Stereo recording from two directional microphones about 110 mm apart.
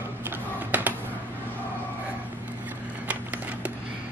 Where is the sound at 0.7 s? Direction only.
15° right (ahead or behind).